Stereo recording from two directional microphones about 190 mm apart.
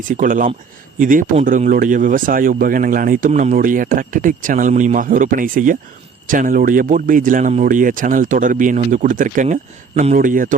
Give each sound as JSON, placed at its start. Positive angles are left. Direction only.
{"t": 0.1, "sound": "speech", "side_deg": -45}
{"t": 10.2, "sound": "speech", "side_deg": -45}